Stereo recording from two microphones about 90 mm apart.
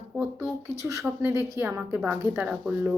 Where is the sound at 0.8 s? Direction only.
35° right (ahead or behind).